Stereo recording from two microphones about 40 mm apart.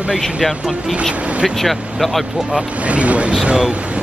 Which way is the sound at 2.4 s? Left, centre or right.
Right.